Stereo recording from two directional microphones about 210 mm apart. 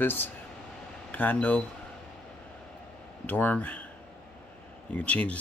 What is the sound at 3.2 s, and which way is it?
Speech, 5° left (ahead or behind).